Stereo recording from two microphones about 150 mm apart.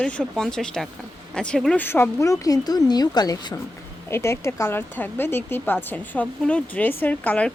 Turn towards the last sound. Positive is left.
turn(degrees=10)  # may be behind; listen again after turning